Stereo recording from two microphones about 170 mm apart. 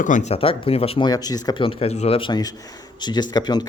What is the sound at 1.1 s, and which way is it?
Speech, 25° left (ahead or behind).